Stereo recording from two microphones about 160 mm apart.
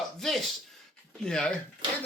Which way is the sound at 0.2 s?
Centre (ahead or behind).